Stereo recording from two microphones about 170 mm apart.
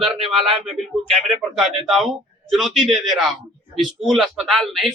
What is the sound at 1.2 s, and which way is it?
A man's voice, centre (ahead or behind).